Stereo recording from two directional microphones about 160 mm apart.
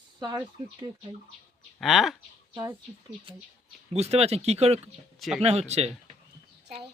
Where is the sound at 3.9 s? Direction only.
40° right (ahead or behind).